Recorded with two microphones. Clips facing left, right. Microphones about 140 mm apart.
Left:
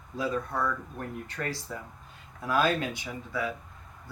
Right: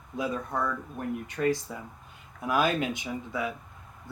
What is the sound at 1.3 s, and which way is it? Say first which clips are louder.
Speech: right 7 dB; 15° right (ahead or behind).